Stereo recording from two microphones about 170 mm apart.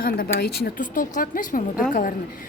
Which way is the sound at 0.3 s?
65° left (ahead or behind).